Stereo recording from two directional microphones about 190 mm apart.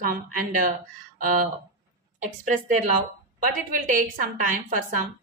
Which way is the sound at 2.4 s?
45° right (ahead or behind).